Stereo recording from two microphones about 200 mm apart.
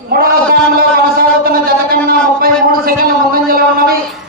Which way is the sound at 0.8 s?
50° right (ahead or behind).